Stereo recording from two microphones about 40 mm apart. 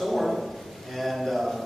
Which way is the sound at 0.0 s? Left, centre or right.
Centre.